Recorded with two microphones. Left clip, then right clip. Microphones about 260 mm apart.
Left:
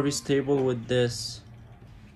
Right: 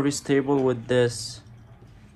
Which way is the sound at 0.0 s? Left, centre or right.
Centre.